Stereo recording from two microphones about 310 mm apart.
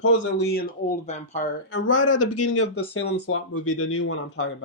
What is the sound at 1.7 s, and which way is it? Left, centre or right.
Speech, left.